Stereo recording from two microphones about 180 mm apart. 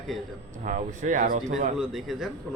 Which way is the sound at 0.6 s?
45° right (ahead or behind).